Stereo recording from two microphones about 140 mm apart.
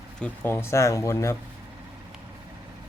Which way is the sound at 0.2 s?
15° left (ahead or behind).